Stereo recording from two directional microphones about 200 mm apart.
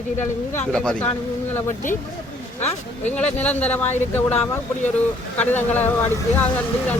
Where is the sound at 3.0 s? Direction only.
10° left (ahead or behind).